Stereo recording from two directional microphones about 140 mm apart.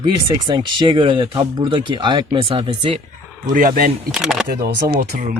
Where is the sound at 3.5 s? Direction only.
85° right.